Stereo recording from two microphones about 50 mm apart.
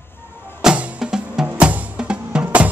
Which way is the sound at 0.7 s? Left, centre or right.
Right.